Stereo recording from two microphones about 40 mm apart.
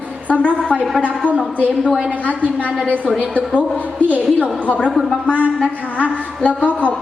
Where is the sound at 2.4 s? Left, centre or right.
Left.